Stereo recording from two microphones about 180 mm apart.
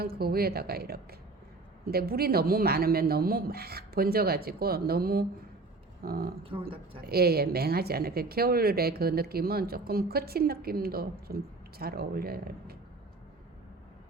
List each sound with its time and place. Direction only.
0.0 s speech: 60° right (ahead or behind)
6.4 s speech: 30° right (ahead or behind)
7.0 s speech: 60° right (ahead or behind)